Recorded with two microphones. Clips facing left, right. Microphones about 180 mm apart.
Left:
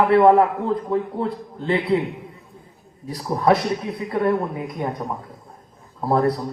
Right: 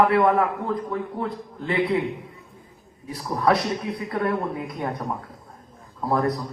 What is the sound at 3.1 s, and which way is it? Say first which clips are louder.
Speech: left 3 dB; 30° left (ahead or behind).